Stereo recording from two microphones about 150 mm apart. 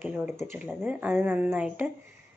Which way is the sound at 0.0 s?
15° right (ahead or behind).